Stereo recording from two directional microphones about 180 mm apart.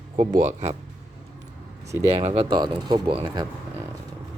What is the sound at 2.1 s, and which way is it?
Speech, 30° right (ahead or behind).